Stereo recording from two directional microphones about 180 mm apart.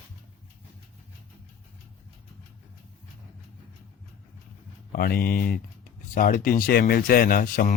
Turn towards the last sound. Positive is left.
turn(degrees=50)  # may be behind; listen again after turning